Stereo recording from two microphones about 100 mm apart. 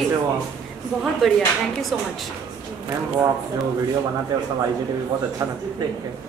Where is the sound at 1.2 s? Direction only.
Centre (ahead or behind).